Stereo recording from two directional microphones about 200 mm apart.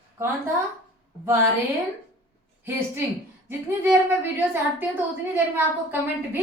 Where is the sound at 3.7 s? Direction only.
10° right (ahead or behind).